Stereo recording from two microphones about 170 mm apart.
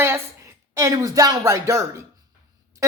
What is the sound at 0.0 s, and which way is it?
A woman's voice, 15° right (ahead or behind).